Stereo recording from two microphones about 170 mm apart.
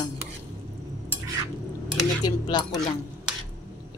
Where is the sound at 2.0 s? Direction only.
25° left (ahead or behind).